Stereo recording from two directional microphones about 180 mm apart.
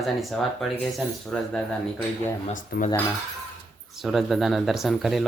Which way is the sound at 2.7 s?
55° left (ahead or behind).